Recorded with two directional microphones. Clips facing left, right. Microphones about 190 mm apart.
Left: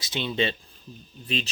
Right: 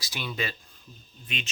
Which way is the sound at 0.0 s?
25° left (ahead or behind).